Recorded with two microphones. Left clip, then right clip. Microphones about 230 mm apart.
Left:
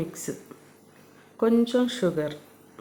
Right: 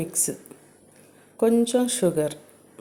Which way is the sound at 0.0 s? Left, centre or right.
Centre.